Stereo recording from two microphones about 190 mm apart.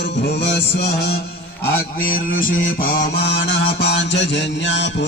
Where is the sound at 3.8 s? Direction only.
70° left (ahead or behind).